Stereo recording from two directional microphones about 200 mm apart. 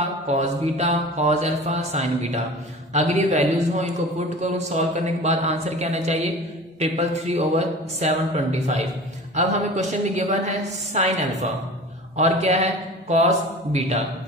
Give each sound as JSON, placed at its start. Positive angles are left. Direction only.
{"t": 0.3, "sound": "speech", "side_deg": -35}